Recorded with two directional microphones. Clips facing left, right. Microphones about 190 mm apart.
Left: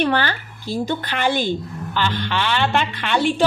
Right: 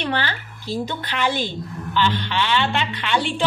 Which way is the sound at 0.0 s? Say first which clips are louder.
Left 5 dB; 50° left (ahead or behind).